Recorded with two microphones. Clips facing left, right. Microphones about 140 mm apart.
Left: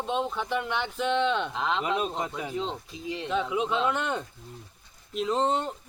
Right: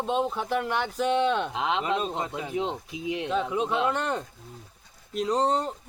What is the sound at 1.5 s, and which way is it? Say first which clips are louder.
Speech: right 1 dB; 15° right (ahead or behind).